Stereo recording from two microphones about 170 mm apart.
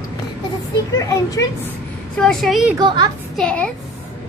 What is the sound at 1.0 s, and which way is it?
Speech, 20° left (ahead or behind).